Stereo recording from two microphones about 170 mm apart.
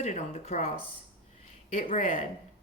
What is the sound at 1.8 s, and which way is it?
Speech, 50° left (ahead or behind).